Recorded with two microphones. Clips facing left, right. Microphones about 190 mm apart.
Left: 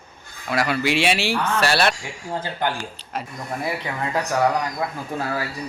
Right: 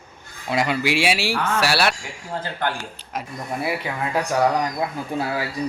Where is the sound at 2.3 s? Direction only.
15° left (ahead or behind).